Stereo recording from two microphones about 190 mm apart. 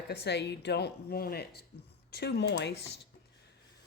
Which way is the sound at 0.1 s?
60° left (ahead or behind).